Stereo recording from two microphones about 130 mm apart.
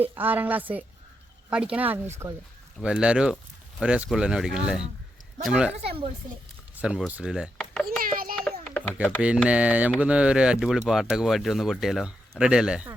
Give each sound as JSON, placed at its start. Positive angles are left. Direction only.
{"t": 0.0, "sound": "a woman's voice", "side_deg": -15}
{"t": 2.2, "sound": "speech", "side_deg": -30}
{"t": 2.8, "sound": "a woman's voice", "side_deg": -10}
{"t": 6.8, "sound": "a woman's voice", "side_deg": -10}
{"t": 7.6, "sound": "children playing", "side_deg": 5}
{"t": 8.0, "sound": "a sound", "side_deg": -90}
{"t": 8.7, "sound": "a sound", "side_deg": 15}
{"t": 9.5, "sound": "a woman's voice", "side_deg": -10}